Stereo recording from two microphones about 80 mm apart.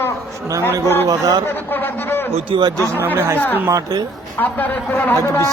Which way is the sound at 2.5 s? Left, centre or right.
Right.